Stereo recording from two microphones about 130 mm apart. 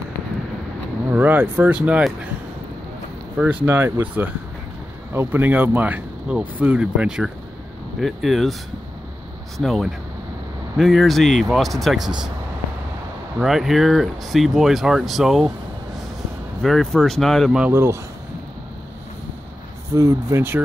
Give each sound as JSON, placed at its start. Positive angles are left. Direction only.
{"t": 1.1, "sound": "speech", "side_deg": -15}
{"t": 3.6, "sound": "speech", "side_deg": -20}
{"t": 9.6, "sound": "speech", "side_deg": 0}
{"t": 13.4, "sound": "speech", "side_deg": 0}
{"t": 16.6, "sound": "speech", "side_deg": 0}
{"t": 17.6, "sound": "speech", "side_deg": -15}
{"t": 19.9, "sound": "speech", "side_deg": -25}